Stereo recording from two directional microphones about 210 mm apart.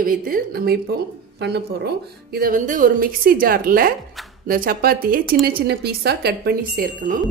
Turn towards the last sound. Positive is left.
turn(degrees=-40)  # may be behind; listen again after turning